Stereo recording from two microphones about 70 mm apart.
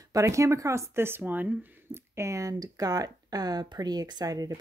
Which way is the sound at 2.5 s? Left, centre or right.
Right.